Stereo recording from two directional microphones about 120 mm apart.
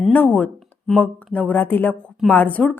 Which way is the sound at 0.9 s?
10° left (ahead or behind).